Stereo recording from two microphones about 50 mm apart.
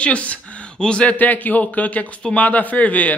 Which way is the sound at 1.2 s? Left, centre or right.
Left.